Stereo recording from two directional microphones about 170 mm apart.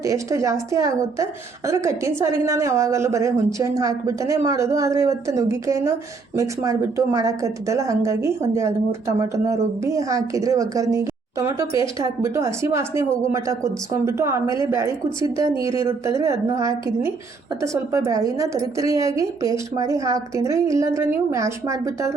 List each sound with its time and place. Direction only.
0.0 s a woman's voice: 20° right (ahead or behind)